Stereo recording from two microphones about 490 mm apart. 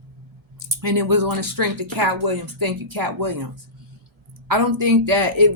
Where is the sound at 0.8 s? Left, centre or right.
Right.